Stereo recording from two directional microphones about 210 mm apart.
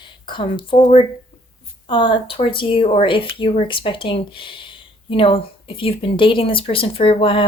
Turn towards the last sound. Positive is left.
turn(degrees=25)  # may be behind; listen again after turning